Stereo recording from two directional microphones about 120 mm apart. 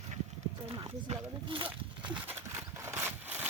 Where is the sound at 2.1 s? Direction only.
20° right (ahead or behind).